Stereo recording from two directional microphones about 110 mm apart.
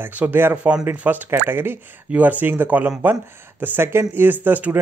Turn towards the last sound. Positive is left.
turn(degrees=-15)  # may be behind; listen again after turning